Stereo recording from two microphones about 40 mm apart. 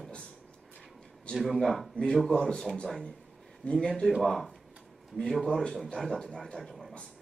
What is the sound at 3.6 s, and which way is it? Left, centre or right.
Speech, left.